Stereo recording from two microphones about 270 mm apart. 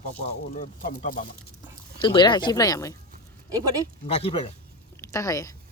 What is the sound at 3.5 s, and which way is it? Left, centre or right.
Speech, centre.